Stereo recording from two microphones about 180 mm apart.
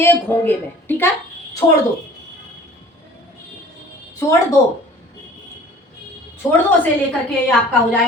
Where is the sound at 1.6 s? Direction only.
25° left (ahead or behind).